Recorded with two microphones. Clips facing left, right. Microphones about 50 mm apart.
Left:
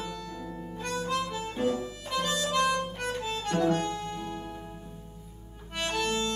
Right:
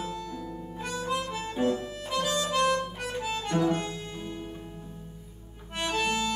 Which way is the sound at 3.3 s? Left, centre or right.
Centre.